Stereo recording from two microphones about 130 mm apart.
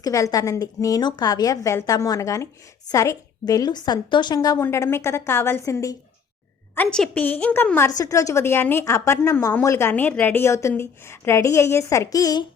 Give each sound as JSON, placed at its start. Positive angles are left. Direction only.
{"t": 0.0, "sound": "a woman's voice", "side_deg": 25}
{"t": 4.6, "sound": "a woman's voice", "side_deg": 20}
{"t": 6.7, "sound": "a woman's voice", "side_deg": 10}
{"t": 7.9, "sound": "a woman's voice", "side_deg": 30}